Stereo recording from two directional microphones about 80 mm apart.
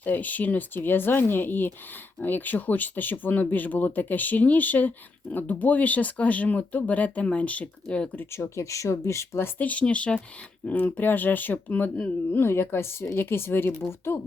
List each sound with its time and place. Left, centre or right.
0.0 s speech: left
8.1 s speech: left
8.4 s speech: left
9.6 s speech: centre
12.4 s speech: left